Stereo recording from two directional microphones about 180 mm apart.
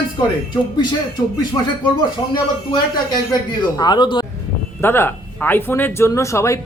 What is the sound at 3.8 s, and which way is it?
Speech, 25° left (ahead or behind).